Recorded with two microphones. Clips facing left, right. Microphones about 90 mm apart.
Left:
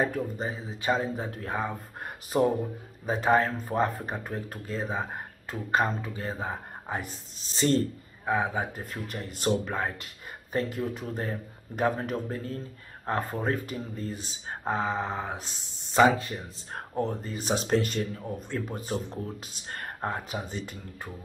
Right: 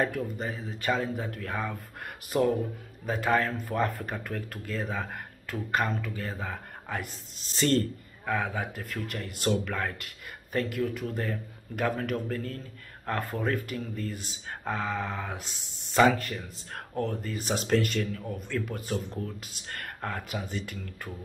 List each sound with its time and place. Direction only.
0.2 s speech: 25° left (ahead or behind)